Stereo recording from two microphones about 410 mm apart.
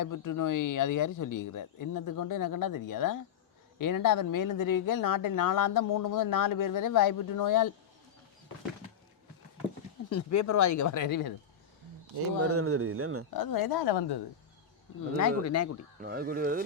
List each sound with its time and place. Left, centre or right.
0.0 s speech: left
10.1 s speech: left
12.4 s speech: right
13.3 s a woman's voice: left
15.1 s speech: left
16.0 s speech: right